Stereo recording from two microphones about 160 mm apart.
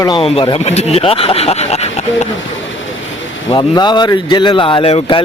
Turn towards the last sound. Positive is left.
turn(degrees=35)  # may be behind; listen again after turning